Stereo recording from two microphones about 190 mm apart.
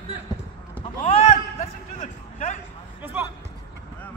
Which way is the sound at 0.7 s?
30° left (ahead or behind).